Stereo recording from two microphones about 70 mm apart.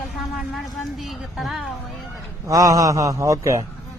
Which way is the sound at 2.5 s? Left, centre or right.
Right.